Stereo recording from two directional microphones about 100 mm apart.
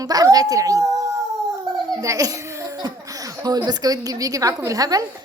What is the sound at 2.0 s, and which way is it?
A woman's voice, 35° right (ahead or behind).